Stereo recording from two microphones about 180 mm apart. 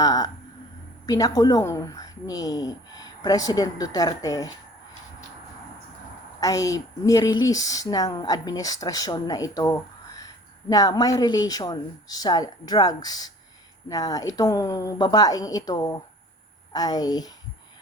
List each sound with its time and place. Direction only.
0.0 s a woman's voice: 20° left (ahead or behind)
6.4 s speech: 20° left (ahead or behind)